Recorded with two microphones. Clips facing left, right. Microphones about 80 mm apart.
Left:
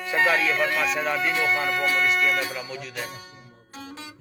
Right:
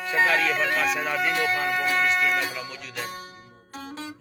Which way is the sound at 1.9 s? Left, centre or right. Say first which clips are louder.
Even; right.